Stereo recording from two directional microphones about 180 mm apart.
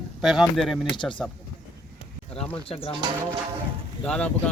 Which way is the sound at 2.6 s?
30° left (ahead or behind).